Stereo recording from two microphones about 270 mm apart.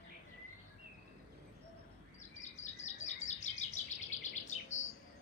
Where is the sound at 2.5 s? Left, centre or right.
Left.